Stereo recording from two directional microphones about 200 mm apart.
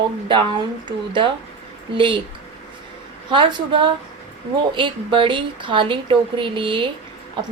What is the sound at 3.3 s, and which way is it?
Speech, 25° right (ahead or behind).